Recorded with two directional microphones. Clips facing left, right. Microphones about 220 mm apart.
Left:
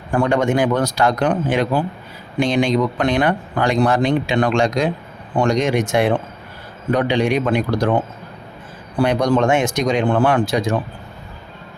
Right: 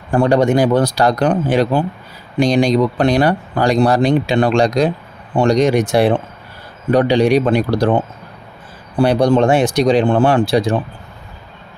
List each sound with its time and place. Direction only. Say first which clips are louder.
0.1 s speech: right 4 dB; 35° right (ahead or behind)
9.0 s speech: right 4 dB; 30° right (ahead or behind)